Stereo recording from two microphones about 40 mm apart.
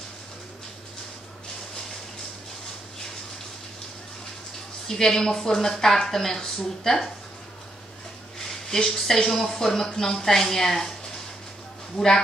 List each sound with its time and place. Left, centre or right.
4.8 s speech: centre
8.6 s speech: centre
12.0 s speech: left